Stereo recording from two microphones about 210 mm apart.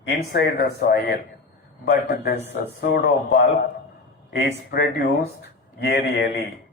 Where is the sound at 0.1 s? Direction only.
55° left (ahead or behind).